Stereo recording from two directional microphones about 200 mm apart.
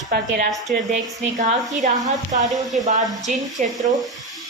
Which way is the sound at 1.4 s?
40° right (ahead or behind).